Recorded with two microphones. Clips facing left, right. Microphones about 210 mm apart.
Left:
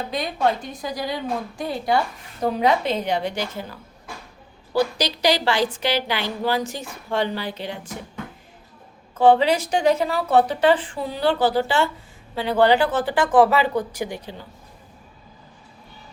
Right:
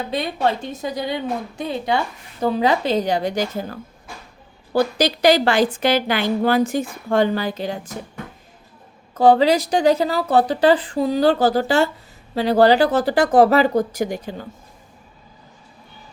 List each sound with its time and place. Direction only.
0.1 s a woman's voice: 25° right (ahead or behind)
2.6 s a woman's voice: 35° right (ahead or behind)
9.1 s speech: 35° right (ahead or behind)